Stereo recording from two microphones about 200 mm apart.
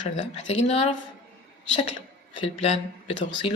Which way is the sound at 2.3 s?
30° left (ahead or behind).